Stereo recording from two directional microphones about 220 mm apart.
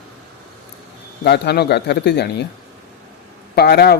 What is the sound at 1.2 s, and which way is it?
A man's voice, 50° left (ahead or behind).